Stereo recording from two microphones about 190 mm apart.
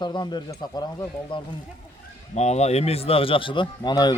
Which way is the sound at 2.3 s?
35° left (ahead or behind).